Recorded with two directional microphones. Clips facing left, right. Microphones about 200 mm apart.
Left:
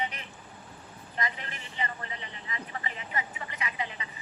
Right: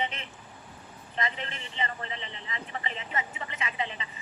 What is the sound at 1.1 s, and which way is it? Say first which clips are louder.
A man's voice: right 2 dB; 25° right (ahead or behind).